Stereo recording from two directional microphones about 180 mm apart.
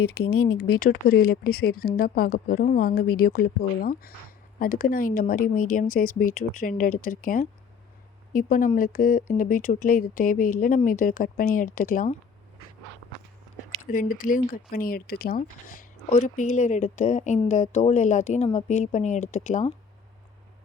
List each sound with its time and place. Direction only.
0.5 s speech: 55° left (ahead or behind)
13.8 s speech: 50° left (ahead or behind)